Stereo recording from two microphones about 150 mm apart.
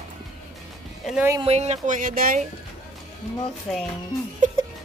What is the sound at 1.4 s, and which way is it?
Speech, 45° right (ahead or behind).